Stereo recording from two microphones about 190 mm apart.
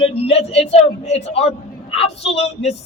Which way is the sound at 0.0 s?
30° left (ahead or behind).